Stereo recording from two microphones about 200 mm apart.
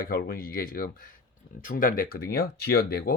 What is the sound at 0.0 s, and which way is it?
Speech, 50° left (ahead or behind).